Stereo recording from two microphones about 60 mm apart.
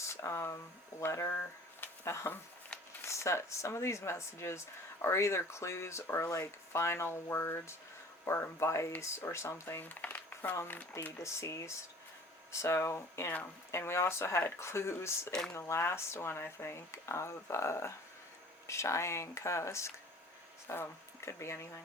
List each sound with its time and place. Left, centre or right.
0.0 s speech: left
1.8 s a sound: left
3.1 s speech: left
6.2 s speech: left
9.8 s a sound: left
10.5 s speech: left
11.2 s speech: left
15.3 s speech: centre
15.5 s speech: left